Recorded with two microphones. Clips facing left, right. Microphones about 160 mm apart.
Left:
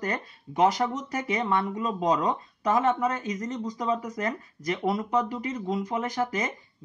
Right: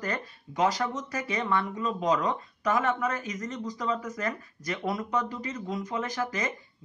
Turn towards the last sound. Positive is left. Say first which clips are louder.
# left 3 dB
turn(degrees=25)  # may be behind; listen again after turning